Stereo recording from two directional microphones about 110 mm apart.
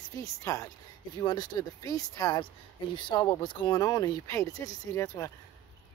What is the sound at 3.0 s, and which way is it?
Speech, 45° left (ahead or behind).